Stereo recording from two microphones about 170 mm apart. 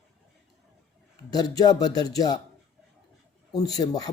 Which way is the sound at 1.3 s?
25° left (ahead or behind).